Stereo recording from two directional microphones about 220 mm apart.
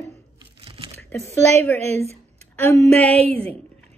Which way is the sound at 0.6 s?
25° right (ahead or behind).